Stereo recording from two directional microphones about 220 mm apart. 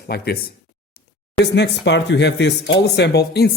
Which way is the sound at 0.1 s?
45° left (ahead or behind).